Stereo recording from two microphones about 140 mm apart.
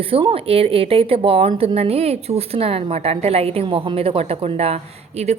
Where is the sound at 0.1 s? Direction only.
40° right (ahead or behind).